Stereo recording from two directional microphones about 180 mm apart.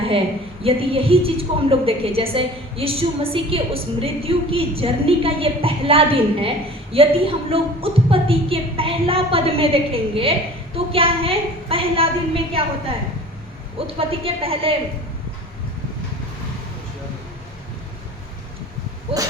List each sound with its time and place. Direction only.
0.6 s a woman's voice: 30° right (ahead or behind)
13.7 s a woman's voice: 30° right (ahead or behind)